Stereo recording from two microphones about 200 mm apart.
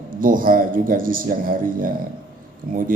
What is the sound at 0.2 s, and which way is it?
A man's voice, 45° right (ahead or behind).